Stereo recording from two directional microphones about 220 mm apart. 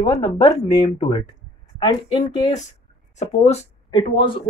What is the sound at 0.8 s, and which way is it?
Speech, 25° left (ahead or behind).